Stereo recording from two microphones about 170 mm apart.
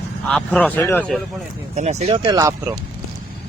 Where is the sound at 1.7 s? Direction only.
40° right (ahead or behind).